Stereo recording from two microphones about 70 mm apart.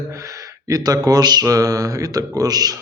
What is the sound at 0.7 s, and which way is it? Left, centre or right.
Speech, right.